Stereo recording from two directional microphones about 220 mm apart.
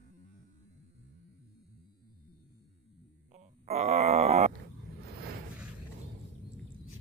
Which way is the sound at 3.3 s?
30° right (ahead or behind).